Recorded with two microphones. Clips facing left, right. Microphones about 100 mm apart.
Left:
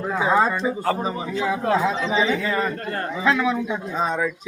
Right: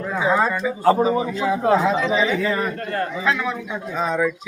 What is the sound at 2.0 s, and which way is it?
Speech, 25° left (ahead or behind).